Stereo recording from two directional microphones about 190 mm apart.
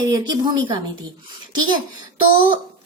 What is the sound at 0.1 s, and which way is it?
A woman's voice, 20° right (ahead or behind).